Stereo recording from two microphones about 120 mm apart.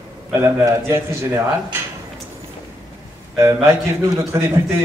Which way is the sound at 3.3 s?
25° right (ahead or behind).